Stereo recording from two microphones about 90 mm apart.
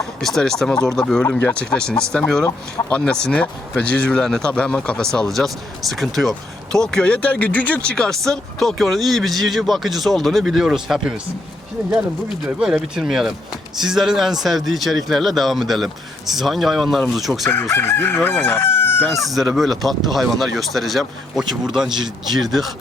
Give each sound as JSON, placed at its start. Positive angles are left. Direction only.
{"t": 0.2, "sound": "speech", "side_deg": 5}
{"t": 12.5, "sound": "speech", "side_deg": -5}
{"t": 17.7, "sound": "chicken", "side_deg": 25}
{"t": 19.0, "sound": "speech", "side_deg": 0}